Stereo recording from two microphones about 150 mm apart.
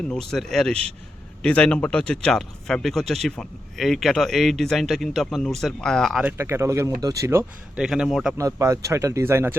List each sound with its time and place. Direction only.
0.1 s speech: 5° left (ahead or behind)
6.2 s speech: 15° right (ahead or behind)
7.8 s speech: 5° right (ahead or behind)
8.4 s speech: 20° right (ahead or behind)